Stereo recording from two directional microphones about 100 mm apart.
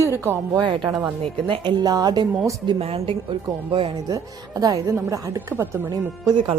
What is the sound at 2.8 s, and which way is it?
Speech, 80° right.